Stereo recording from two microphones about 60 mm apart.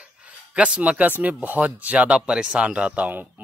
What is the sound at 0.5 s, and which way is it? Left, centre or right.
Speech, centre.